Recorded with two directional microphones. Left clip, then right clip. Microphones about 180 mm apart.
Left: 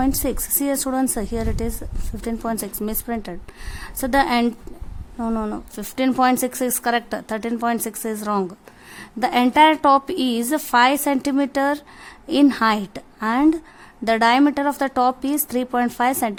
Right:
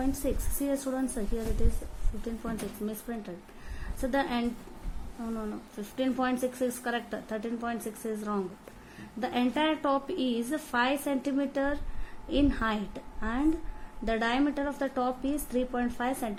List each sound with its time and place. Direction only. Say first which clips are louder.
0.0 s a woman's voice: left 10 dB; 50° left (ahead or behind)
2.4 s a woman's voice: left 11 dB; 55° left (ahead or behind)